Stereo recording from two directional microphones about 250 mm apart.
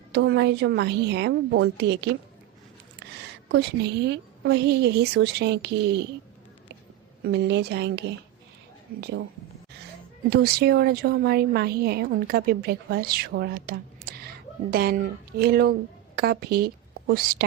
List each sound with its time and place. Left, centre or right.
0.1 s a woman's voice: right
3.5 s a woman's voice: right
7.3 s a woman's voice: right
10.2 s a woman's voice: right